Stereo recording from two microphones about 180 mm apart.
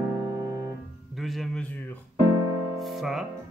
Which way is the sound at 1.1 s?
Centre (ahead or behind).